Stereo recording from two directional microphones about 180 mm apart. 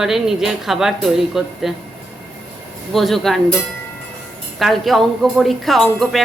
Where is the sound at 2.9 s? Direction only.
Centre (ahead or behind).